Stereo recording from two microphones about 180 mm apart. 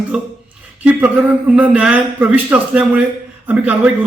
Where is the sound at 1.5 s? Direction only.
10° right (ahead or behind).